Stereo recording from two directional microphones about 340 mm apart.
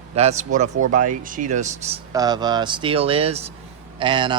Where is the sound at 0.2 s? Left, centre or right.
Centre.